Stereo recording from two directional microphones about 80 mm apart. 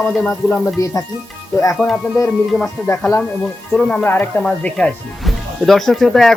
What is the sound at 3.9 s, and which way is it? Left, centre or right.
Speech, left.